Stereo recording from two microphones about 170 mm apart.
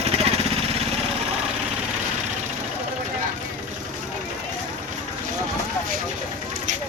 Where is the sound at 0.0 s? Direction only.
40° right (ahead or behind).